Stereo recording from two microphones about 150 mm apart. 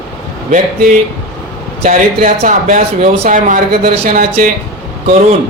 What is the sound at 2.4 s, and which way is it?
Speech, 60° right (ahead or behind).